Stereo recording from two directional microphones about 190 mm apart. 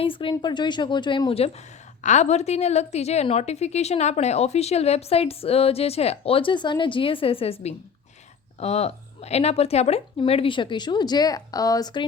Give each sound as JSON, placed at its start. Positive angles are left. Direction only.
{"t": 0.0, "sound": "a woman's voice", "side_deg": 25}